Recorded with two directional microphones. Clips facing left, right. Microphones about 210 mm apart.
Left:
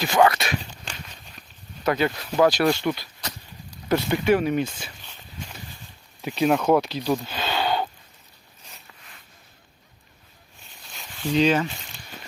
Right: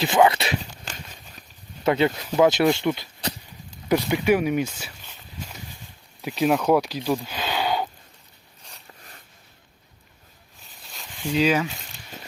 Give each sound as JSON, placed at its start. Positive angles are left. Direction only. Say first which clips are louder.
{"t": 0.0, "sound": "speech", "louder": "right 1 dB", "side_deg": -25}
{"t": 1.8, "sound": "speech", "louder": "right 2 dB", "side_deg": -25}
{"t": 3.8, "sound": "speech", "louder": "even", "side_deg": -10}
{"t": 6.2, "sound": "speech", "louder": "even", "side_deg": 0}
{"t": 6.7, "sound": "speech", "louder": "even", "side_deg": -10}
{"t": 7.3, "sound": "a sound", "louder": "even", "side_deg": -10}
{"t": 8.9, "sound": "a sound", "louder": "right 3 dB", "side_deg": -40}
{"t": 10.6, "sound": "a sound", "louder": "even", "side_deg": 0}
{"t": 11.2, "sound": "speech", "louder": "left 1 dB", "side_deg": -10}